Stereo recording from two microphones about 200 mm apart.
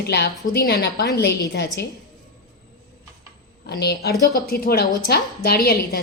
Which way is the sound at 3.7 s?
55° left (ahead or behind).